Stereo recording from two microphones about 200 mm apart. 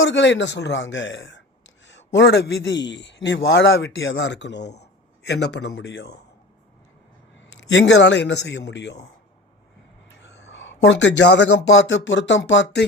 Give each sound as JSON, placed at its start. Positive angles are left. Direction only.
{"t": 0.0, "sound": "a man's voice", "side_deg": 65}
{"t": 7.6, "sound": "a man's voice", "side_deg": 65}
{"t": 10.2, "sound": "speech", "side_deg": 65}